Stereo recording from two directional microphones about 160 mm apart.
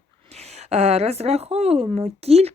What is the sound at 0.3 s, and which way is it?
A woman's voice, 40° right (ahead or behind).